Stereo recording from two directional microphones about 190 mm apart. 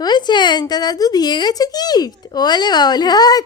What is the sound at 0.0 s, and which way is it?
Speech, 20° left (ahead or behind).